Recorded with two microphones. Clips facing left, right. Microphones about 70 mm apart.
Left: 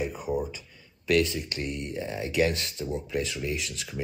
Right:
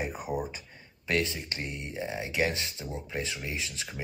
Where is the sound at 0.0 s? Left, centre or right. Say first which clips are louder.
Left 3 dB; right.